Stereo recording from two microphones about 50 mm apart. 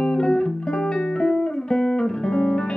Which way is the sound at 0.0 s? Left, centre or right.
Centre.